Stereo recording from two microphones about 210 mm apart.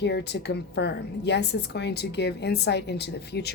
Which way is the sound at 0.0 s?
55° left (ahead or behind).